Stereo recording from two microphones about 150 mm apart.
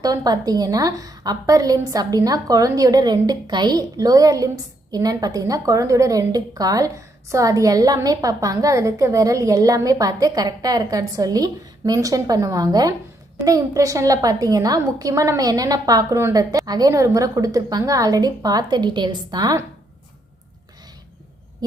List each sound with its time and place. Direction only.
0.0 s a woman's voice: 25° right (ahead or behind)